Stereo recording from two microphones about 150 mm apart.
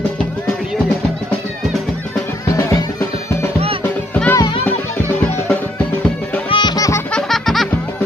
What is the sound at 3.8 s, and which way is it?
Music, 10° left (ahead or behind).